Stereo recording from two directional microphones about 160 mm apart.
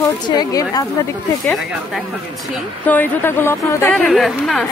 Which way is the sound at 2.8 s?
10° left (ahead or behind).